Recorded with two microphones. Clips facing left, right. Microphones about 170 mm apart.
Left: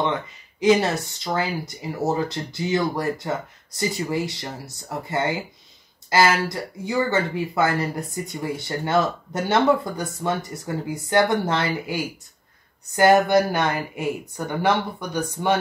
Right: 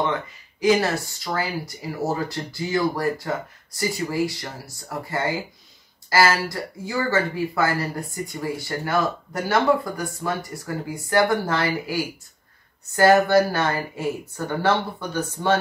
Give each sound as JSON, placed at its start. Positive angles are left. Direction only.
{"t": 0.1, "sound": "speech", "side_deg": 20}